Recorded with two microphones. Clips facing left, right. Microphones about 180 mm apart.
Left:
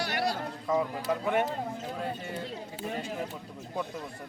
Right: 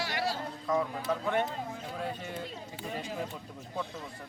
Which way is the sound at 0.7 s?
20° left (ahead or behind).